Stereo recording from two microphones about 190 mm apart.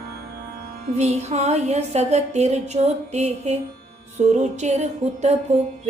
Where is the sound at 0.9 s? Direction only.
35° right (ahead or behind).